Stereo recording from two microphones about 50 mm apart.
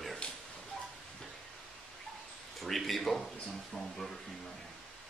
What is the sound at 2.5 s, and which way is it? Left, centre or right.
Speech, centre.